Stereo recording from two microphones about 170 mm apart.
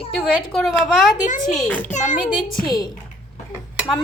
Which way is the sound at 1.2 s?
45° left (ahead or behind).